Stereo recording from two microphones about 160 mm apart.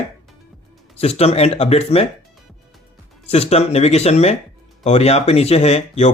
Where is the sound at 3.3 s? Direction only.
40° left (ahead or behind).